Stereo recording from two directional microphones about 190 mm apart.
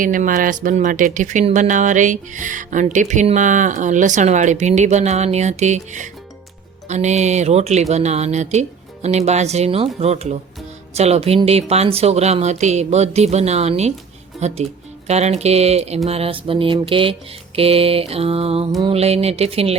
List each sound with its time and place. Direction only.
0.0 s speech: 45° right (ahead or behind)